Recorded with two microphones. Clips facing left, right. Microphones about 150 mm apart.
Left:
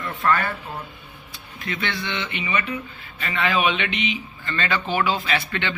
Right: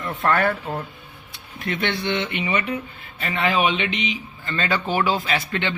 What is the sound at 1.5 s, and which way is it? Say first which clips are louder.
Speech: right 4 dB; 55° right (ahead or behind).